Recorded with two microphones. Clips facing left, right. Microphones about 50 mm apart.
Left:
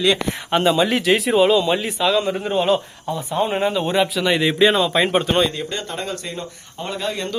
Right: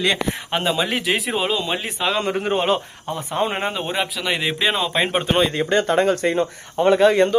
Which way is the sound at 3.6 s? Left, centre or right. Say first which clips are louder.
Left 4 dB; right.